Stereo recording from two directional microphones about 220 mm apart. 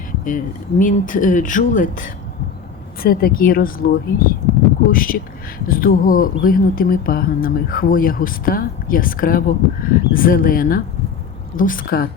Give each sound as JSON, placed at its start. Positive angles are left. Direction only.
{"t": 0.3, "sound": "a woman's voice", "side_deg": 35}